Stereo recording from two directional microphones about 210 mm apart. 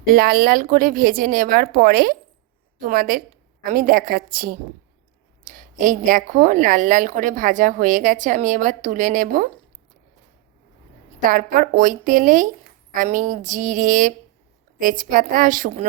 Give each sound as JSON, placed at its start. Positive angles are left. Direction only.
{"t": 0.0, "sound": "a woman's voice", "side_deg": -45}
{"t": 11.3, "sound": "a woman's voice", "side_deg": -40}